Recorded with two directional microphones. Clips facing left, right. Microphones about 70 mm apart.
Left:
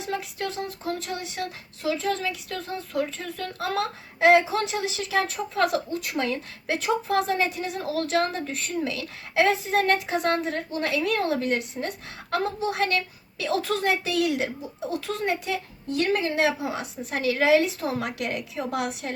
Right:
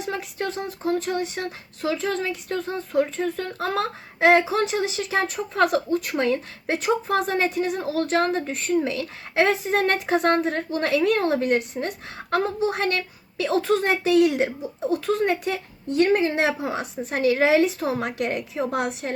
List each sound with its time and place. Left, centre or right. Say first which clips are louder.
0.3 s speech: right 2 dB; right